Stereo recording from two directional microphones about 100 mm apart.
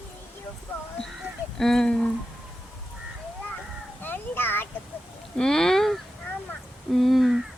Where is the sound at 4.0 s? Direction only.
20° left (ahead or behind).